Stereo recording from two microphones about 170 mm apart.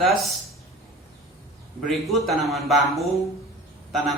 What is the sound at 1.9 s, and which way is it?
Speech, centre (ahead or behind).